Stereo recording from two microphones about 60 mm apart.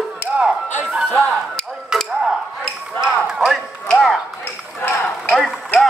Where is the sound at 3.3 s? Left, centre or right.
Centre.